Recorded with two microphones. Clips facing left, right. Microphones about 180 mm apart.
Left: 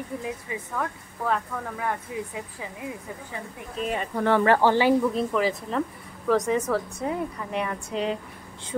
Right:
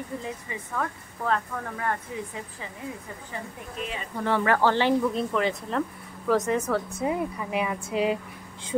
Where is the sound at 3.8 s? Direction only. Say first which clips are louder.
Left 5 dB; 55° left (ahead or behind).